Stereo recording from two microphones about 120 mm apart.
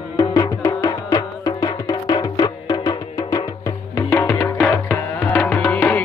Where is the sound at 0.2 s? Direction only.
30° left (ahead or behind).